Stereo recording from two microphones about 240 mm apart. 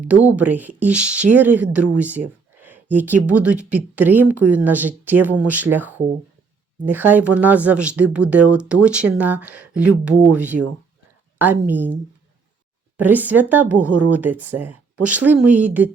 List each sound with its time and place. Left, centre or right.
0.1 s speech: centre
13.0 s speech: centre